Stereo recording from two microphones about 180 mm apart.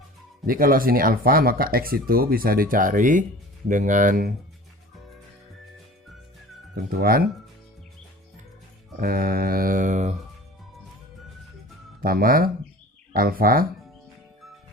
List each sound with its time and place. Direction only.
0.4 s speech: 55° right (ahead or behind)
7.0 s speech: 55° right (ahead or behind)
9.0 s speech: 55° right (ahead or behind)
11.9 s speech: 55° right (ahead or behind)